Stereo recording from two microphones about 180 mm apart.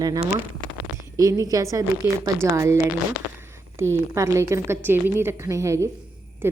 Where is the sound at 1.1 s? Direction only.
20° right (ahead or behind).